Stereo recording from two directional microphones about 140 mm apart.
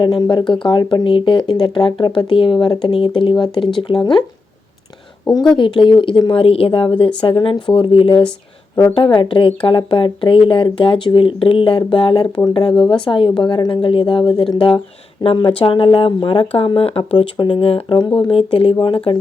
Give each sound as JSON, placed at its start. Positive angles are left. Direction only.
{"t": 0.0, "sound": "speech", "side_deg": 35}
{"t": 5.5, "sound": "speech", "side_deg": 35}